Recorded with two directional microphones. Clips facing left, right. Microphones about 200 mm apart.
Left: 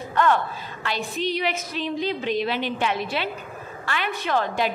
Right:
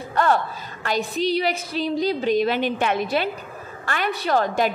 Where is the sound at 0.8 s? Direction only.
40° right (ahead or behind).